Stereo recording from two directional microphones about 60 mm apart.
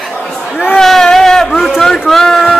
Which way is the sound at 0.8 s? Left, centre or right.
Centre.